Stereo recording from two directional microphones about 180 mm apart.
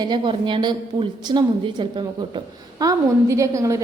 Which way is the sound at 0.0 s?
25° right (ahead or behind).